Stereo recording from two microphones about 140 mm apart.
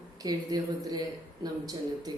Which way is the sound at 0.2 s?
25° right (ahead or behind).